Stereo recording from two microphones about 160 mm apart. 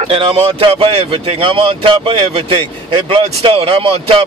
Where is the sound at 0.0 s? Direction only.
35° right (ahead or behind).